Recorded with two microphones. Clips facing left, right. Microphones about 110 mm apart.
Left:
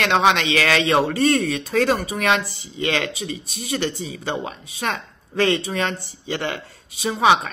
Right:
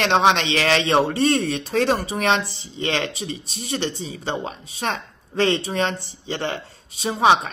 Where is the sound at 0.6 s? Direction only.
25° right (ahead or behind).